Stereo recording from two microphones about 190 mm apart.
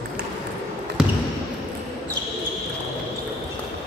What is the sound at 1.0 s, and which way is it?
Basketball bounce, 5° right (ahead or behind).